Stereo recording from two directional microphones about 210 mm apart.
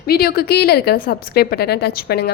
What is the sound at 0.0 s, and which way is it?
A woman's voice, 45° left (ahead or behind).